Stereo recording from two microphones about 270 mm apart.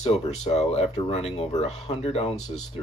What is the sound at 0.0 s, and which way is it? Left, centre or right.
Speech, left.